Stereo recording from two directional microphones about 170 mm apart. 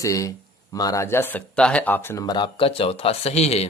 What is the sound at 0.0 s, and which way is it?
Speech, 20° left (ahead or behind).